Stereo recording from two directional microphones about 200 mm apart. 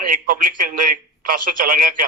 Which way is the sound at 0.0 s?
40° right (ahead or behind).